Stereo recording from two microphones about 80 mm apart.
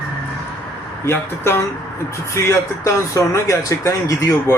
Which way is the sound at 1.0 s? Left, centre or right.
Left.